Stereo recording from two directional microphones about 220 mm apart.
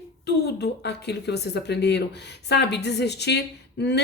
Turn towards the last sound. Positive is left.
turn(degrees=50)  # may be behind; listen again after turning